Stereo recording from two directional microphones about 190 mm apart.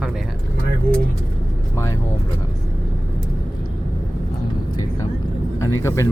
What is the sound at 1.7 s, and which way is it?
Vehicle, 15° left (ahead or behind).